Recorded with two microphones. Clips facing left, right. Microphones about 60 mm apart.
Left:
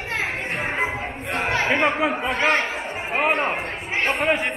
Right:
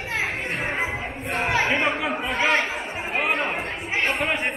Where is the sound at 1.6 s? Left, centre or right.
Centre.